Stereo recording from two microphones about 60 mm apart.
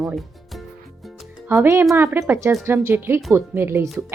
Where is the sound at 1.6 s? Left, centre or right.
Right.